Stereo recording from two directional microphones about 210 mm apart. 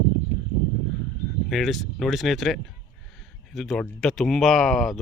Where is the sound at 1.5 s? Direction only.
Centre (ahead or behind).